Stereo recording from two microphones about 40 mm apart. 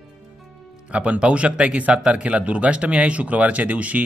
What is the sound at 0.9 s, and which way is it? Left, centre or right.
Speech, right.